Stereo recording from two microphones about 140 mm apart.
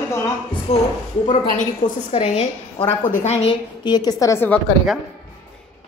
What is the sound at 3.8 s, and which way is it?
Speech, 30° left (ahead or behind).